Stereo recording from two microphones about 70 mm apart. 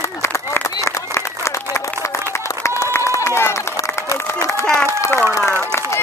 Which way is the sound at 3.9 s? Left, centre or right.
Left.